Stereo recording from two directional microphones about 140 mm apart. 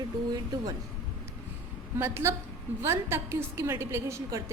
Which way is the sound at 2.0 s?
15° right (ahead or behind).